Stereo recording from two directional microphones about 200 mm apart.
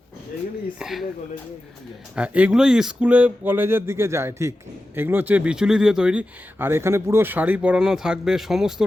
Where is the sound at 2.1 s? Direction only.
5° right (ahead or behind).